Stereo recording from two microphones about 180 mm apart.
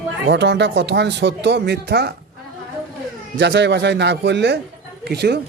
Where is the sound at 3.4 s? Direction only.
70° right (ahead or behind).